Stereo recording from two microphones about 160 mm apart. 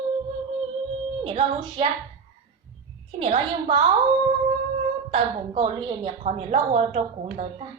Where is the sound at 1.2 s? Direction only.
40° right (ahead or behind).